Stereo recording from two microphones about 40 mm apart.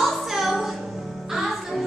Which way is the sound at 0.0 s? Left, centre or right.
Centre.